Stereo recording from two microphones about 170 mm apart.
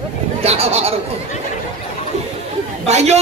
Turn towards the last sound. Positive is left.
turn(degrees=-40)  # may be behind; listen again after turning